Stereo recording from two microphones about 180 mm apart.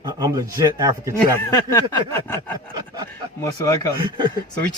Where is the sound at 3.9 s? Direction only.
25° right (ahead or behind).